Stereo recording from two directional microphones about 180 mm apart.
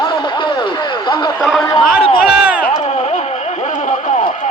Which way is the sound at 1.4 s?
Centre (ahead or behind).